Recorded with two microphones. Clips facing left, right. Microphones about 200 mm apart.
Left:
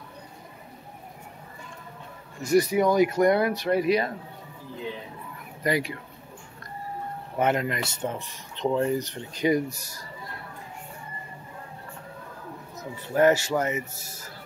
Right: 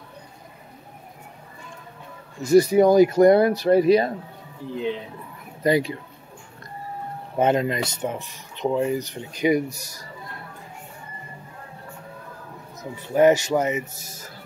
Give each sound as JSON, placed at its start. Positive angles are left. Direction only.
{"t": 2.4, "sound": "speech", "side_deg": -30}
{"t": 5.6, "sound": "speech", "side_deg": -25}
{"t": 7.3, "sound": "speech", "side_deg": -25}
{"t": 8.0, "sound": "speech", "side_deg": -10}
{"t": 13.1, "sound": "speech", "side_deg": -15}